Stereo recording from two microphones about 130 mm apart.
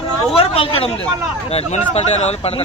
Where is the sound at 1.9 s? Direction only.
55° left (ahead or behind).